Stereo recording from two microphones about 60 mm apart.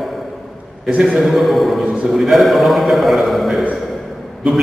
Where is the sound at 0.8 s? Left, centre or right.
Centre.